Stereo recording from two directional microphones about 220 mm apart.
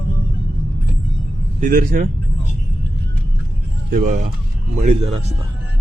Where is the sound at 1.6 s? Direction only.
40° right (ahead or behind).